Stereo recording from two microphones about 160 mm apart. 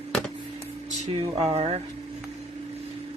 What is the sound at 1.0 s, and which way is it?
Speech, 40° right (ahead or behind).